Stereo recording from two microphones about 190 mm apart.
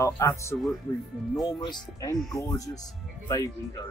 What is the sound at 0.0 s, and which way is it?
Speech, 15° left (ahead or behind).